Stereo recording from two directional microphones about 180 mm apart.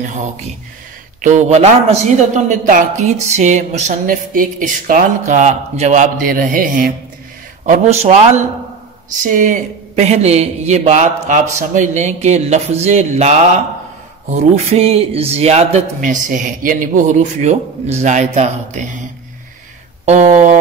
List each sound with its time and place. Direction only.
0.1 s a man's voice: 40° right (ahead or behind)
20.1 s a man's voice: 40° right (ahead or behind)